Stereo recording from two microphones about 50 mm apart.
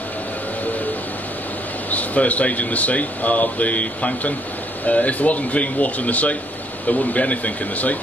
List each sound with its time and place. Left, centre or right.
1.9 s speech: left